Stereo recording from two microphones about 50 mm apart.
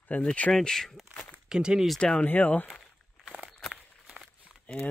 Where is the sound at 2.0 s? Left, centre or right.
Centre.